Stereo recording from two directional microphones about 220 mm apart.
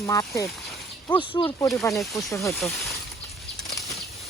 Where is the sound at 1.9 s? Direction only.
Centre (ahead or behind).